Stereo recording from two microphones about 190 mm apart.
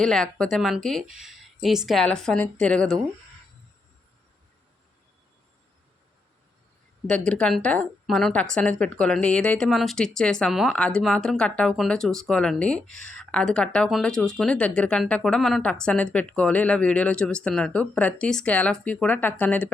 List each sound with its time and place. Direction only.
0.0 s a woman's voice: 5° left (ahead or behind)
7.1 s a woman's voice: 5° left (ahead or behind)